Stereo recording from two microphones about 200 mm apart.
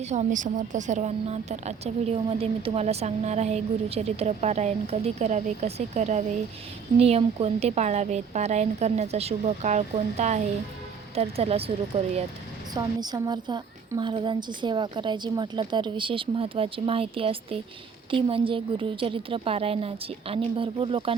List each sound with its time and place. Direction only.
0.0 s speech: 35° right (ahead or behind)
12.7 s a woman's voice: 20° right (ahead or behind)